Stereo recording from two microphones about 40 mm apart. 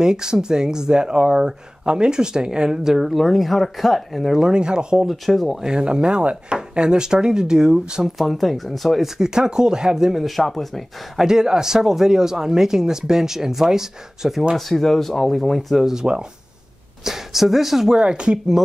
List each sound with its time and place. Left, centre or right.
0.0 s speech: centre
3.0 s speech: centre
4.4 s speech: right
5.0 s speech: centre
5.6 s speech: centre
8.2 s speech: centre
9.2 s speech: centre
10.2 s speech: centre
11.1 s speech: centre
14.7 s speech: centre
15.8 s speech: centre
17.9 s speech: right